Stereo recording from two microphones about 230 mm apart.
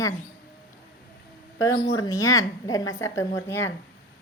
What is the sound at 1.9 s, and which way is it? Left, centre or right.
Speech, centre.